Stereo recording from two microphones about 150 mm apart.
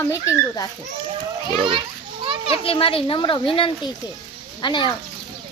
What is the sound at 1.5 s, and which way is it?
Children playing, 35° right (ahead or behind).